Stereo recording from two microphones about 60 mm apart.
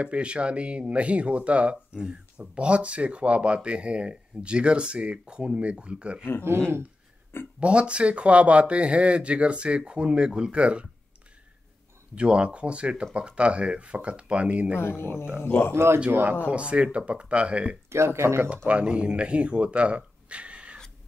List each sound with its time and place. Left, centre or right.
0.0 s speech: centre
7.6 s speech: centre
12.2 s speech: centre
14.8 s speech: left
15.7 s speech: right
16.4 s speech: centre
17.8 s speech: right
18.7 s speech: centre
20.2 s a sound: centre